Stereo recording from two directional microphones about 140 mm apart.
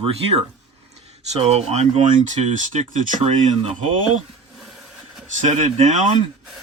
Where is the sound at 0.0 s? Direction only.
45° right (ahead or behind).